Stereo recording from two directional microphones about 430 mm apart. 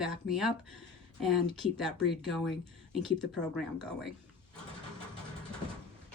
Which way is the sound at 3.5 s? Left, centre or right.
Centre.